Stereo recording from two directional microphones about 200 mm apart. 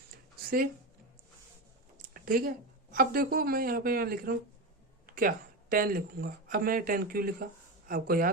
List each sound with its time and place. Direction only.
2.0 s a woman's voice: 45° right (ahead or behind)